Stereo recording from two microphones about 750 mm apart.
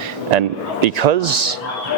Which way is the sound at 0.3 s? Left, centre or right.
Right.